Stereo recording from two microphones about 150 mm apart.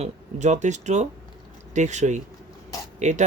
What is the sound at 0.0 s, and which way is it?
Speech, 50° right (ahead or behind).